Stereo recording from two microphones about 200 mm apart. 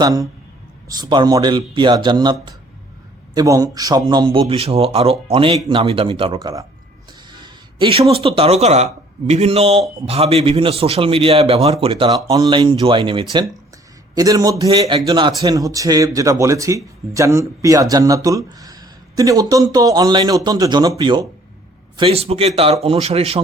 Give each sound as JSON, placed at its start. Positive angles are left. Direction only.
{"t": 0.0, "sound": "a man's voice", "side_deg": -15}